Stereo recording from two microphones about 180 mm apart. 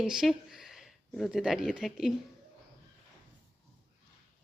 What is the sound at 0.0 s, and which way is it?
Speech, centre (ahead or behind).